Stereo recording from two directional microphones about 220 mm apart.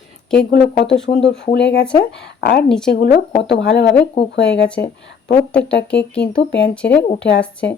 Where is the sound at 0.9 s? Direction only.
55° left (ahead or behind).